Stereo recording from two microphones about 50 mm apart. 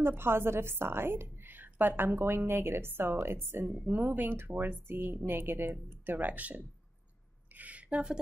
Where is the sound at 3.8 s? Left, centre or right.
Right.